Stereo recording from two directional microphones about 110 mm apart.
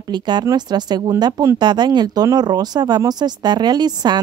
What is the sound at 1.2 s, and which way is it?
Speech, 30° right (ahead or behind).